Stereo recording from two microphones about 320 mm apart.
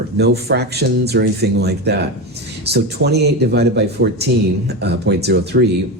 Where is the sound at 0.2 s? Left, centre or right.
Right.